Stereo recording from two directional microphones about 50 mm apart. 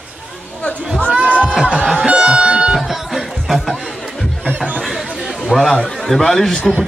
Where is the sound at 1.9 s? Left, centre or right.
Centre.